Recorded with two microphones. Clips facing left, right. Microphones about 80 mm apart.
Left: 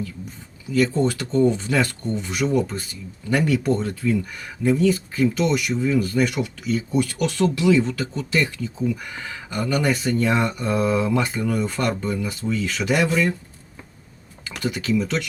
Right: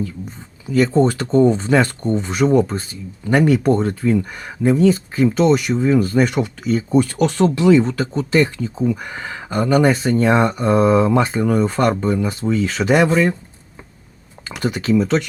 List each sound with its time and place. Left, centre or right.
0.7 s speech: right
14.6 s speech: right